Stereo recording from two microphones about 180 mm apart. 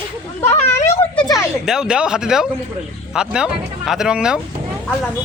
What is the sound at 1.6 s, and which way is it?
Speech, 5° right (ahead or behind).